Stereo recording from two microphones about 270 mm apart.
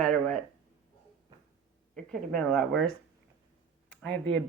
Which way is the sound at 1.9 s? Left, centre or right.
Centre.